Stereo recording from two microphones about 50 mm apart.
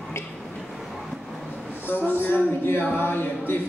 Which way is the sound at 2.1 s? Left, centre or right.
Left.